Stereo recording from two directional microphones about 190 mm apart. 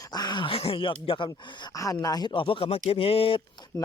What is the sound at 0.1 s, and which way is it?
Speech, 20° left (ahead or behind).